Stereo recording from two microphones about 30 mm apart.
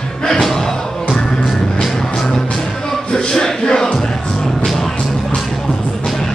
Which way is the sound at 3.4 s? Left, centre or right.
Left.